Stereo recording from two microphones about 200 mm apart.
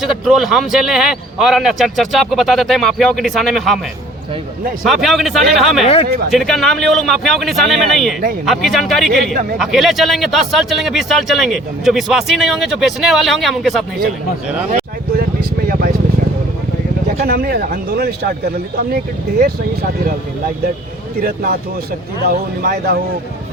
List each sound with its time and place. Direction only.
0.0 s a man's voice: centre (ahead or behind)
4.9 s a man's voice: centre (ahead or behind)
5.8 s speech: 25° left (ahead or behind)
6.3 s a man's voice: centre (ahead or behind)
9.3 s speech: 40° right (ahead or behind)
9.6 s a man's voice: centre (ahead or behind)
14.7 s a sound: 50° right (ahead or behind)
17.2 s speech: 45° right (ahead or behind)
19.4 s speech: 50° right (ahead or behind)
21.2 s speech: 50° right (ahead or behind)